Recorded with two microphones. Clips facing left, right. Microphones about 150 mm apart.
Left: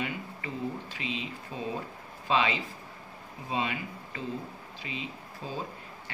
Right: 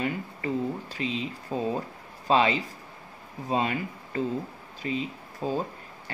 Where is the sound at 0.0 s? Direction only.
40° right (ahead or behind).